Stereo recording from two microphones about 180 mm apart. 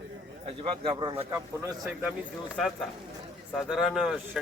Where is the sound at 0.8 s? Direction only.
25° right (ahead or behind).